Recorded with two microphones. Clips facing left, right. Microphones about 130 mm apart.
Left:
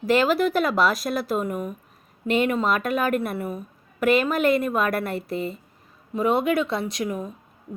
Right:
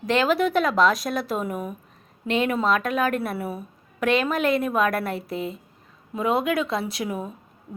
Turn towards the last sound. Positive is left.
turn(degrees=-5)  # may be behind; listen again after turning